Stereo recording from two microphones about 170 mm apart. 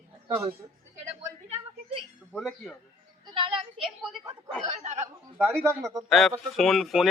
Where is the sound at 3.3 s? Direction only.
30° right (ahead or behind).